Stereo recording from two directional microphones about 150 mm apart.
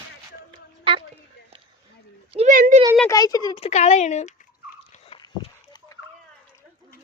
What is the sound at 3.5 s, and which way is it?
Speech, 45° left (ahead or behind).